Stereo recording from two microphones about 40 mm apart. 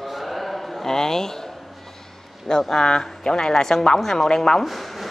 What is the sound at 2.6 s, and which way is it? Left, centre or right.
Speech, centre.